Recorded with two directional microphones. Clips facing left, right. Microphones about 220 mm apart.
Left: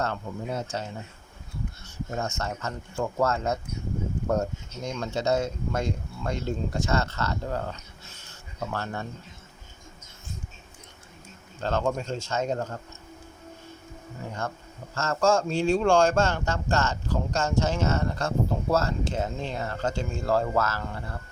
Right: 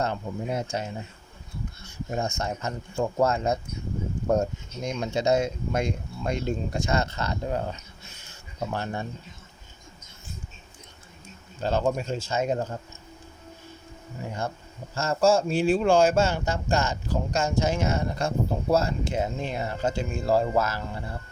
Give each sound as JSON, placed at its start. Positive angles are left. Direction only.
{"t": 0.0, "sound": "speech", "side_deg": -15}
{"t": 2.0, "sound": "speech", "side_deg": -15}
{"t": 11.6, "sound": "speech", "side_deg": -10}
{"t": 14.9, "sound": "speech", "side_deg": -10}